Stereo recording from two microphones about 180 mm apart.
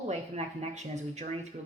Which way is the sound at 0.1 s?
40° right (ahead or behind).